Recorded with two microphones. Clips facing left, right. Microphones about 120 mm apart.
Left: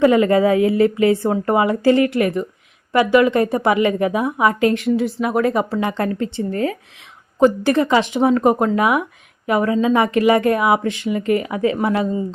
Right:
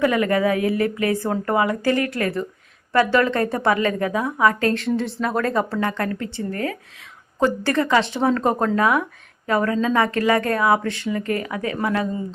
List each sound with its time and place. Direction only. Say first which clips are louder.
0.0 s a woman's voice: left 5 dB; 25° left (ahead or behind)